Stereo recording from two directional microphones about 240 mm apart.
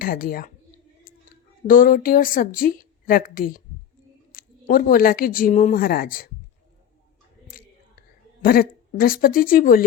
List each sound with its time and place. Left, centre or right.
0.0 s a woman's voice: left
1.6 s a woman's voice: left
8.4 s a woman's voice: left